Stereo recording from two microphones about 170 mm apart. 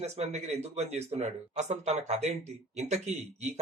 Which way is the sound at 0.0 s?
40° right (ahead or behind).